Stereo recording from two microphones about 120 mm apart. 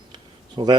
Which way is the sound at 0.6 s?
35° right (ahead or behind).